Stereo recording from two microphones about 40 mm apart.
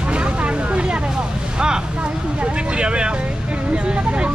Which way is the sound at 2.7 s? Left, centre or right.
Right.